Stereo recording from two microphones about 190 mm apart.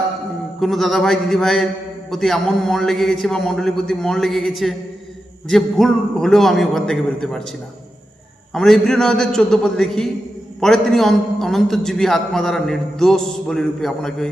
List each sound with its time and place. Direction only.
0.6 s a man's voice: centre (ahead or behind)
8.5 s a man's voice: centre (ahead or behind)